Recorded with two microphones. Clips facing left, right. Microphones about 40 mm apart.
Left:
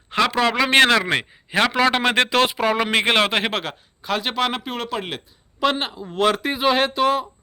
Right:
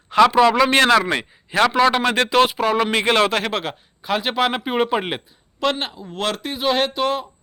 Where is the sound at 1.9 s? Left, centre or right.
Left.